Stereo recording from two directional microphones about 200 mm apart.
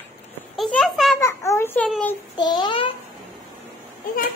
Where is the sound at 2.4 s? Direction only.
20° left (ahead or behind).